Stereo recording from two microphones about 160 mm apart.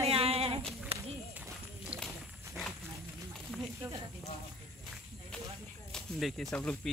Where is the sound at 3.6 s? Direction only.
20° right (ahead or behind).